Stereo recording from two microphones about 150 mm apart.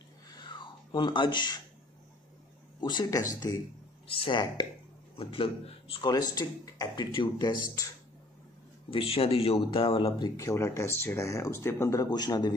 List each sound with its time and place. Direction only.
0.4 s a sound: 30° left (ahead or behind)
2.8 s speech: 30° left (ahead or behind)
6.0 s speech: 25° left (ahead or behind)
8.9 s speech: 40° left (ahead or behind)